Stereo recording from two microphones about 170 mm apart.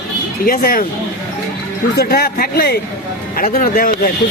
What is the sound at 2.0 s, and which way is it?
A man's voice, 65° left (ahead or behind).